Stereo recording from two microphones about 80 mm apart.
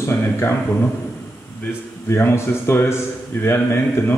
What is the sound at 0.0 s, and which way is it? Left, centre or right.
Speech, left.